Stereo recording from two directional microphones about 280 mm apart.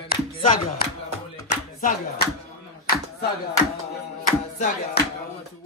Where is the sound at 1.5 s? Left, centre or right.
Left.